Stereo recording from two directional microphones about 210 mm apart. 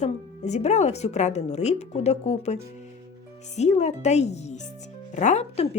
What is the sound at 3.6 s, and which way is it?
Speech, 30° left (ahead or behind).